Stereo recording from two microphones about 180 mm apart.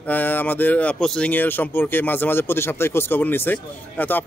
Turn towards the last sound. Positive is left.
turn(degrees=10)  # may be behind; listen again after turning